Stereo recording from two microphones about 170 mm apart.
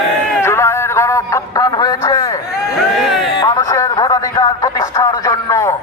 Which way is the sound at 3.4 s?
25° left (ahead or behind).